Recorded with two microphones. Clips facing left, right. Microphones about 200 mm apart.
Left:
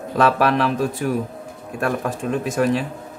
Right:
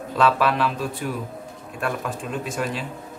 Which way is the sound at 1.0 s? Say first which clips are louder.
Left 6 dB; 50° left (ahead or behind).